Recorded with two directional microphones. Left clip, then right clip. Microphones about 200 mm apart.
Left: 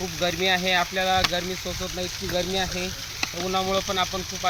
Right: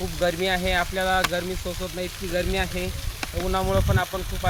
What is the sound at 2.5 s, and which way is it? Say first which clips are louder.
Speech: even; 30° right (ahead or behind).